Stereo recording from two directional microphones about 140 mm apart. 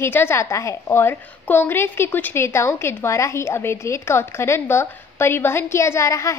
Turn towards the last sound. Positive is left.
turn(degrees=20)  # may be behind; listen again after turning